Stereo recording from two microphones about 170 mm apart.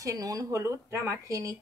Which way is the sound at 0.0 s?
20° right (ahead or behind).